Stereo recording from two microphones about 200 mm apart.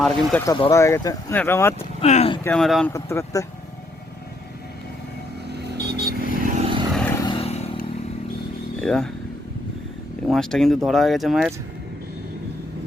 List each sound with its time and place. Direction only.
0.0 s speech: centre (ahead or behind)
0.4 s speech: 20° left (ahead or behind)
2.0 s a sound: 30° left (ahead or behind)
2.4 s speech: 5° left (ahead or behind)
2.9 s speech: 15° left (ahead or behind)
5.5 s vehicle: 55° right (ahead or behind)
6.6 s vehicle: 25° right (ahead or behind)
6.9 s vehicle: 10° left (ahead or behind)
7.3 s vehicle: 30° left (ahead or behind)
8.8 s speech: 5° left (ahead or behind)
10.2 s speech: centre (ahead or behind)